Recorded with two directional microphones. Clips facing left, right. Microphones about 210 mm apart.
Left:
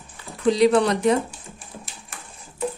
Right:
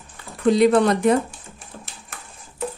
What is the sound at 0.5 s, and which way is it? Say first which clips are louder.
Speech: right 2 dB; 50° right (ahead or behind).